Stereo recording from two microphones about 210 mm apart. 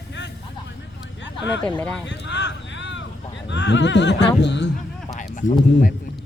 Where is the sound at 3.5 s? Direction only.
55° left (ahead or behind).